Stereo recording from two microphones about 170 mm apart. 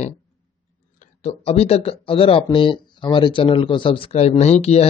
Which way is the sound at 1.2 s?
35° left (ahead or behind).